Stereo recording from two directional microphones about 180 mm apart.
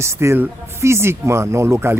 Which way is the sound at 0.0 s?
15° right (ahead or behind).